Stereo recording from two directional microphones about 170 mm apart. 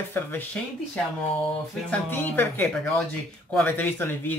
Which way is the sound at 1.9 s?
10° left (ahead or behind).